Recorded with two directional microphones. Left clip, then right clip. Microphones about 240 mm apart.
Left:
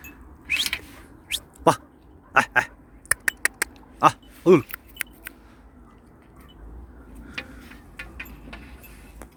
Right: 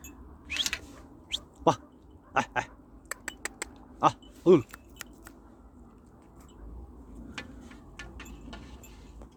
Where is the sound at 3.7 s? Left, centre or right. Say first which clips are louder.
Left 5 dB; centre.